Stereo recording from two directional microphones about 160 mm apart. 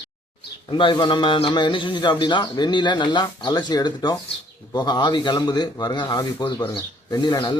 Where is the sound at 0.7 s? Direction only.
30° left (ahead or behind).